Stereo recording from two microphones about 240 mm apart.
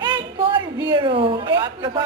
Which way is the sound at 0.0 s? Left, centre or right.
Centre.